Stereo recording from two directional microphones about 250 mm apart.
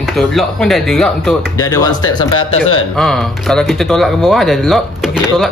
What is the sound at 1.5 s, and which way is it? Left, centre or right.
Speech, centre.